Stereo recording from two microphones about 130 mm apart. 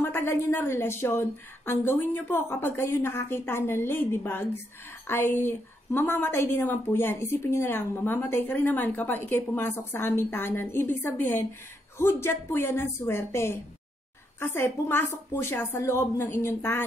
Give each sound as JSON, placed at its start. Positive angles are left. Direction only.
{"t": 0.0, "sound": "a woman's voice", "side_deg": 15}